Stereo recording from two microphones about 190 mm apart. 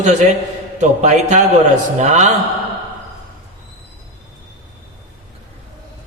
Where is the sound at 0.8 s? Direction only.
40° right (ahead or behind).